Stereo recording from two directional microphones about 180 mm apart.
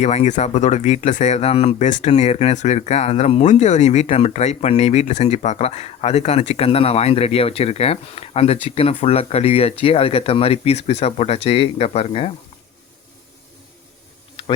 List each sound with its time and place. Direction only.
0.0 s speech: 40° left (ahead or behind)